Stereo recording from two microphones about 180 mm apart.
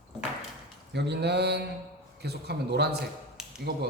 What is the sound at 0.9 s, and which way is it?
Speech, 65° right (ahead or behind).